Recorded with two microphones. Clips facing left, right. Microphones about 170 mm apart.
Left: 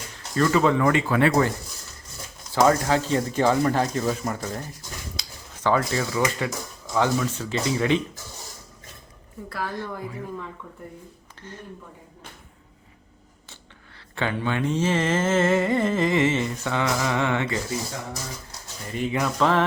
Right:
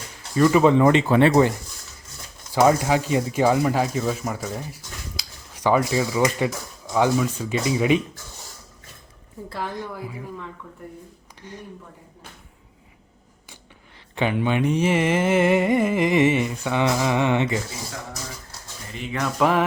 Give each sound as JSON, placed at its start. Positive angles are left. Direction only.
{"t": 0.3, "sound": "speech", "side_deg": -15}
{"t": 2.6, "sound": "speech", "side_deg": -15}
{"t": 9.5, "sound": "speech", "side_deg": -20}
{"t": 11.4, "sound": "speech", "side_deg": -15}
{"t": 14.2, "sound": "speech", "side_deg": -15}
{"t": 19.4, "sound": "speech", "side_deg": -10}